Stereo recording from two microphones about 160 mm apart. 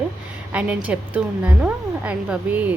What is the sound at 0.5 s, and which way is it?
A woman's voice, 10° right (ahead or behind).